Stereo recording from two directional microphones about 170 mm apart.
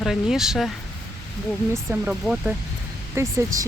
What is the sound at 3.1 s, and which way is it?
Speech, 20° right (ahead or behind).